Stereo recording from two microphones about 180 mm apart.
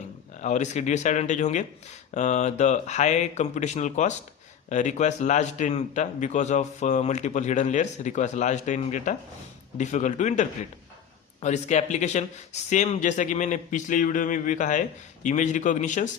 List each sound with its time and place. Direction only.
0.4 s a man's voice: 40° left (ahead or behind)